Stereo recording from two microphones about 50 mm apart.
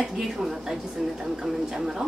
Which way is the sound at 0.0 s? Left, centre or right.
Centre.